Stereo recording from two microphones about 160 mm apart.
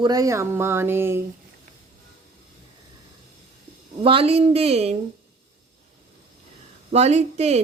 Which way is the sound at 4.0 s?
35° right (ahead or behind).